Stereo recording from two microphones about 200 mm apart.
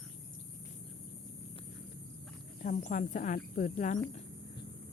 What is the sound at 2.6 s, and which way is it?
Speech, 40° left (ahead or behind).